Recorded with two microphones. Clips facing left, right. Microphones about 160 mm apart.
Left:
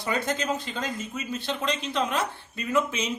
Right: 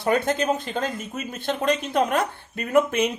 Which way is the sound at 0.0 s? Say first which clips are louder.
Right 6 dB; 55° right (ahead or behind).